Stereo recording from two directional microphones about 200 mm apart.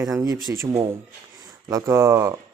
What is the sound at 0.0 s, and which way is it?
Speech, 15° right (ahead or behind).